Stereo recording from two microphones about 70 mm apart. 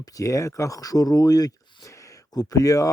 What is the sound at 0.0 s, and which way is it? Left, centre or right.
Speech, left.